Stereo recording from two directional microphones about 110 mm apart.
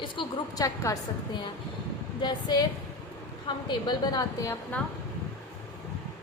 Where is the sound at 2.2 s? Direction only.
40° left (ahead or behind).